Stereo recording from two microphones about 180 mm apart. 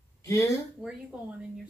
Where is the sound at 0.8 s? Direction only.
5° right (ahead or behind).